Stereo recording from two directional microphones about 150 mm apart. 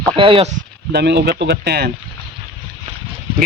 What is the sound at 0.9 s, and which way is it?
Speech, 90° right.